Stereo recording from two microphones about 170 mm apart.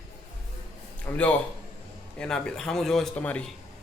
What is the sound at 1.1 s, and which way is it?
Speech, 20° left (ahead or behind).